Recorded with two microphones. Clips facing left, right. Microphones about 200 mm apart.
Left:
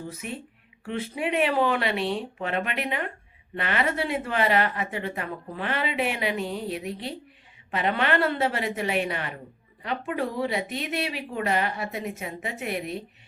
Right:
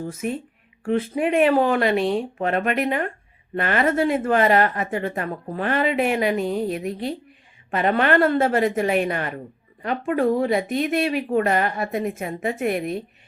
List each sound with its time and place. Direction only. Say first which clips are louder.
0.0 s speech: right 8 dB; 45° right (ahead or behind)